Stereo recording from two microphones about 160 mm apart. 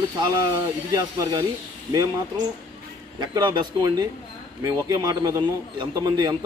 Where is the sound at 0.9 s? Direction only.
25° right (ahead or behind).